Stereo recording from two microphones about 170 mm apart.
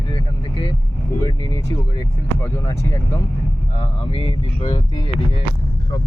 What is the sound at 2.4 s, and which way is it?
Speech, 20° left (ahead or behind).